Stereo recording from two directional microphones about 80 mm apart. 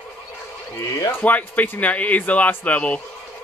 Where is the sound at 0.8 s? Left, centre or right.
Left.